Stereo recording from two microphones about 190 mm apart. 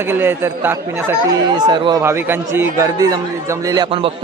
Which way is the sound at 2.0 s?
10° right (ahead or behind).